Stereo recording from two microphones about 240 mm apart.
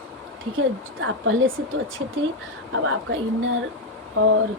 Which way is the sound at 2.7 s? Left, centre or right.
Right.